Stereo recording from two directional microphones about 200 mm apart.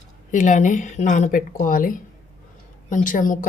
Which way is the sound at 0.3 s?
40° left (ahead or behind).